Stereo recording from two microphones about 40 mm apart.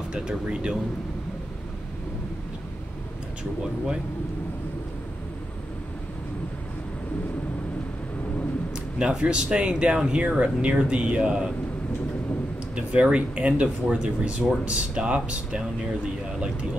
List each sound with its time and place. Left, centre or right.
0.1 s speech: right
8.9 s speech: right
12.7 s speech: right